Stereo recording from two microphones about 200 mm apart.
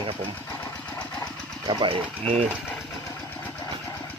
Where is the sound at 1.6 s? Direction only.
25° right (ahead or behind).